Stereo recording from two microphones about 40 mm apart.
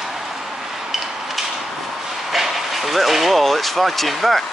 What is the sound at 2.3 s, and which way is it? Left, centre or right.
Vehicle, centre.